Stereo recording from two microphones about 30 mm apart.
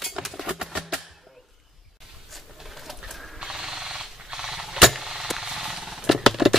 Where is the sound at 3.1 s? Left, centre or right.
Centre.